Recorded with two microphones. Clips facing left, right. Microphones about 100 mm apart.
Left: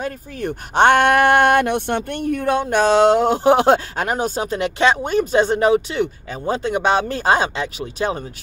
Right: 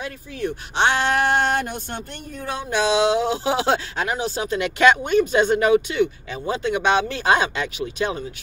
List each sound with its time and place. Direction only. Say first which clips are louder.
0.0 s speech: left 2 dB; 50° left (ahead or behind); by 8.2 s 35° left (ahead or behind)